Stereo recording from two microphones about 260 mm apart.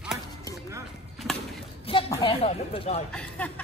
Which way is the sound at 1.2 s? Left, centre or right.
Centre.